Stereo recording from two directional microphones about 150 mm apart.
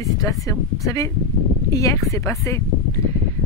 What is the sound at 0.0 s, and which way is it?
Speech, 20° left (ahead or behind).